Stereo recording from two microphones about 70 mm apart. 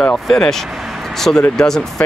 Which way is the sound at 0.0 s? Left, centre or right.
Centre.